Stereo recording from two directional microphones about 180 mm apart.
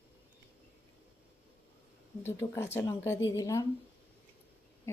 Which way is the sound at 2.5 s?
15° left (ahead or behind).